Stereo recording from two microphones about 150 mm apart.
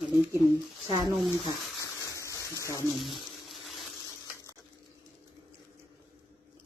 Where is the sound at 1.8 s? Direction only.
20° left (ahead or behind).